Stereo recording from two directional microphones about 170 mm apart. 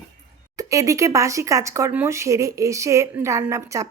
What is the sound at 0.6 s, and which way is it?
Speech, 20° right (ahead or behind).